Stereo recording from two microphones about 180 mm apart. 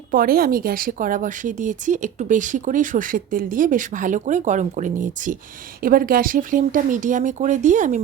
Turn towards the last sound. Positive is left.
turn(degrees=-45)  # may be behind; listen again after turning